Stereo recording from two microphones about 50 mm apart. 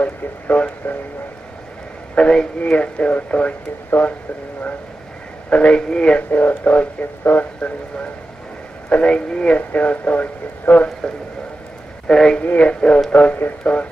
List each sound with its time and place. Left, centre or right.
0.0 s speech: left
2.1 s a man's voice: centre
5.5 s speech: left
6.1 s speech: left
9.6 s speech: left
12.1 s speech: centre
12.4 s speech: left